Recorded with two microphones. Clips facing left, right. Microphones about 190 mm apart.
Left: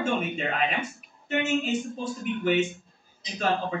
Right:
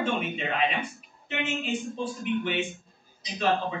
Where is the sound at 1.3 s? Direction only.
40° left (ahead or behind).